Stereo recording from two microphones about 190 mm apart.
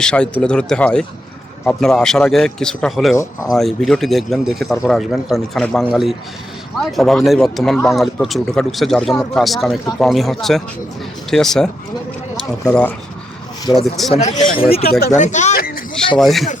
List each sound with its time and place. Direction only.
0.0 s speech: 5° left (ahead or behind)
3.2 s speech: 20° left (ahead or behind)
3.6 s speech: centre (ahead or behind)
14.1 s a man's voice: 35° left (ahead or behind)
14.5 s speech: 50° left (ahead or behind)
15.1 s speech: 40° left (ahead or behind)
16.1 s speech: centre (ahead or behind)